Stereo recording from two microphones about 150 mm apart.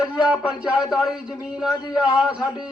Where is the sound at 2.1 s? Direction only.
5° right (ahead or behind).